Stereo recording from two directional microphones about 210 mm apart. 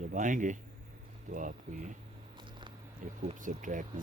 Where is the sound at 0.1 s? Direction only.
35° right (ahead or behind).